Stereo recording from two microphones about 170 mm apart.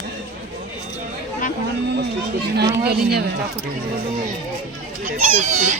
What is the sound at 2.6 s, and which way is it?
Speech, 70° right (ahead or behind).